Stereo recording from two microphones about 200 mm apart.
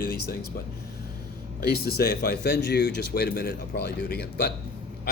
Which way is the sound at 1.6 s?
50° left (ahead or behind).